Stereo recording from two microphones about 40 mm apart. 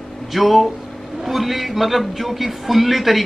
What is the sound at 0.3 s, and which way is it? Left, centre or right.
Speech, centre.